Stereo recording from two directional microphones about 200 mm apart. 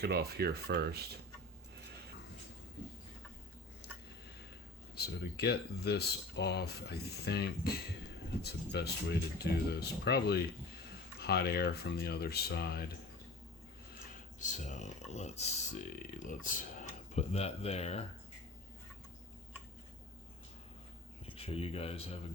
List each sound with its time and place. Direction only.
0.0 s speech: 50° right (ahead or behind)
3.8 s a sound: 55° left (ahead or behind)
4.9 s speech: 55° left (ahead or behind)
14.1 s speech: 40° left (ahead or behind)
21.2 s speech: 30° left (ahead or behind)